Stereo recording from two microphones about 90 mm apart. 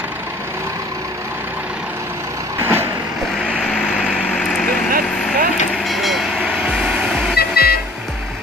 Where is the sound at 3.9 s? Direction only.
10° right (ahead or behind).